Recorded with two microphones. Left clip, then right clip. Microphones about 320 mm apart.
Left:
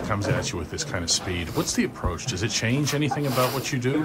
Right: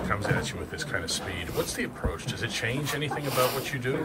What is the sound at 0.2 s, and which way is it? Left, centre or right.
Speech, centre.